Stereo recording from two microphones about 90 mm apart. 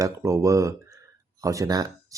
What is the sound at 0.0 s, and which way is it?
Speech, 35° right (ahead or behind).